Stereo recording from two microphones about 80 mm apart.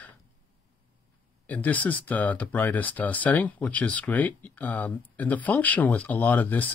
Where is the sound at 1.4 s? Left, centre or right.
Centre.